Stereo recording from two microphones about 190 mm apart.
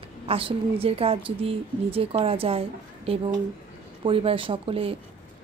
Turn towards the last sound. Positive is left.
turn(degrees=-30)  # may be behind; listen again after turning